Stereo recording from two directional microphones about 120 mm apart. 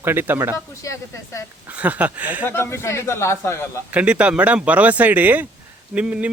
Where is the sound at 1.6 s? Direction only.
10° right (ahead or behind).